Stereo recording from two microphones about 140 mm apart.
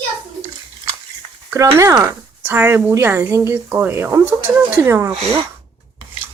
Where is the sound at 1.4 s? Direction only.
20° right (ahead or behind).